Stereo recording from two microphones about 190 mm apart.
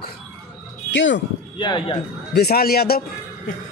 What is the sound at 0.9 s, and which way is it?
Speech, 70° left (ahead or behind).